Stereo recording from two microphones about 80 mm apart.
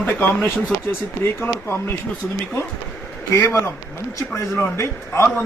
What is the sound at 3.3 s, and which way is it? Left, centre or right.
Speech, left.